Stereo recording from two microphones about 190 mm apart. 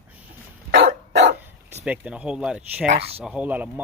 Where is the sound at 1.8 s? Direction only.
5° right (ahead or behind).